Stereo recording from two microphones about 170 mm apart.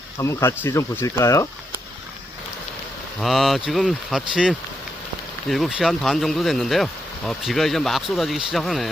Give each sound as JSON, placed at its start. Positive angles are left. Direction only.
{"t": 0.2, "sound": "speech", "side_deg": 15}
{"t": 3.2, "sound": "speech", "side_deg": 0}